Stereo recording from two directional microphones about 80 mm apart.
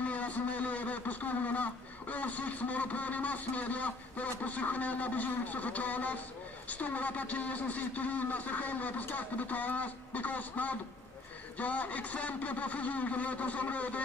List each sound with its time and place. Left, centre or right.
0.0 s a man's voice: centre